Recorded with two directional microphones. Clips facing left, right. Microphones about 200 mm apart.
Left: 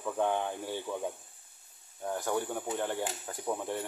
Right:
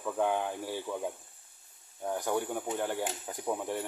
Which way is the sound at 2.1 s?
15° right (ahead or behind).